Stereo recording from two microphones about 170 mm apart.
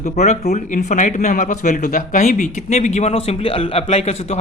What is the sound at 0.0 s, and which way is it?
A man's voice, 40° left (ahead or behind).